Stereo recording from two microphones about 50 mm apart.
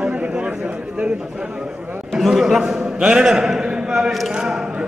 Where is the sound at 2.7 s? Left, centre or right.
Centre.